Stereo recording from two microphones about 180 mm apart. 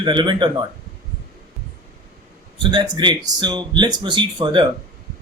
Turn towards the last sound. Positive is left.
turn(degrees=-25)  # may be behind; listen again after turning